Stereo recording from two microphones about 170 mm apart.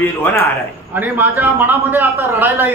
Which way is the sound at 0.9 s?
10° right (ahead or behind).